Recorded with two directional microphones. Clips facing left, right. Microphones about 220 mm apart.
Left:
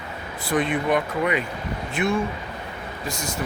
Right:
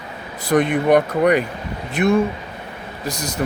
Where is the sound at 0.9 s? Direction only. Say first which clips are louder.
Right 10 dB; 40° right (ahead or behind).